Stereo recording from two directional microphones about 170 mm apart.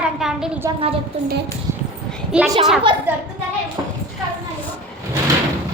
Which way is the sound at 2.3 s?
5° right (ahead or behind).